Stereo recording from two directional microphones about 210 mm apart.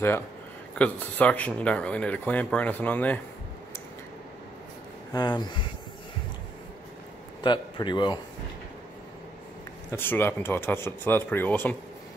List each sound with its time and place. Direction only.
0.7 s speech: 5° left (ahead or behind)
5.1 s a man's voice: 20° left (ahead or behind)
7.4 s a man's voice: 20° left (ahead or behind)
9.8 s speech: 10° left (ahead or behind)